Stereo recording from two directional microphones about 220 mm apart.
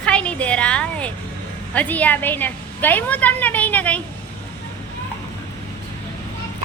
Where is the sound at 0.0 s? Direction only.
5° left (ahead or behind).